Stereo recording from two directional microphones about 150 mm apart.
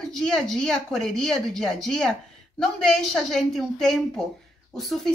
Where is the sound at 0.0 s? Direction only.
5° left (ahead or behind).